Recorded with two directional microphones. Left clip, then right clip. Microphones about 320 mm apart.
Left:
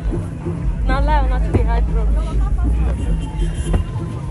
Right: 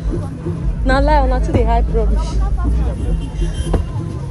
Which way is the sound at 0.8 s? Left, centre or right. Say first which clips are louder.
Right 6 dB; right.